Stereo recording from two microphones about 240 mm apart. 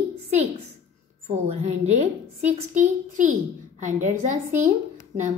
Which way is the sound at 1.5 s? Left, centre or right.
Right.